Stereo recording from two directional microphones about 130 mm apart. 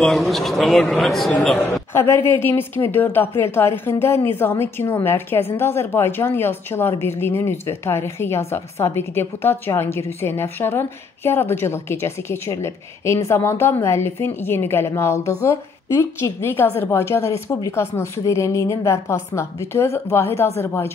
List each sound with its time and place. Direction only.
0.0 s speech: centre (ahead or behind)
2.0 s a woman's voice: 20° left (ahead or behind)